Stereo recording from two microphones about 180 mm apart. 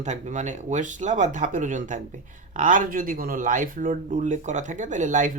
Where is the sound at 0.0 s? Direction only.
40° right (ahead or behind).